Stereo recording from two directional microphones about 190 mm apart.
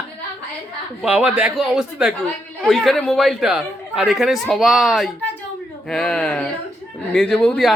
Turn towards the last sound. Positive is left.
turn(degrees=5)  # may be behind; listen again after turning